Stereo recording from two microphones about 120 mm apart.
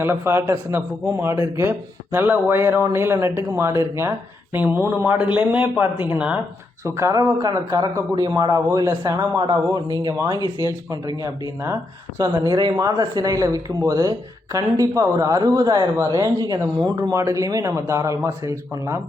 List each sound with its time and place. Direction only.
0.0 s speech: 20° right (ahead or behind)
6.8 s speech: 25° right (ahead or behind)